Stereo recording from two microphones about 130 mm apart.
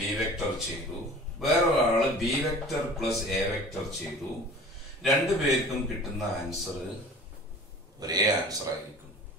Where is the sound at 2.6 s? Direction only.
Centre (ahead or behind).